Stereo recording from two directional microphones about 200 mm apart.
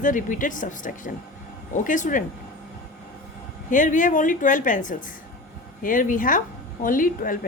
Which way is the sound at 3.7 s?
40° left (ahead or behind).